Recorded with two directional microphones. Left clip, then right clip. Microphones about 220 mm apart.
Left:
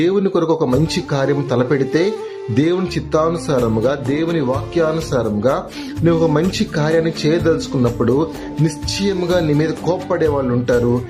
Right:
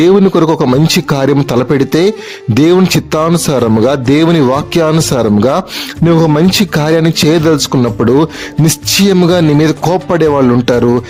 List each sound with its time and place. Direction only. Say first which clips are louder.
0.0 s speech: right 8 dB; 50° right (ahead or behind)